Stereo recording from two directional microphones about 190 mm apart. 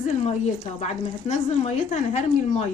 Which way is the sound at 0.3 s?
35° left (ahead or behind).